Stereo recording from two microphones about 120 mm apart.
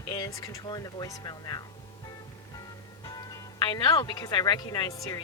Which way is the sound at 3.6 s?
40° left (ahead or behind).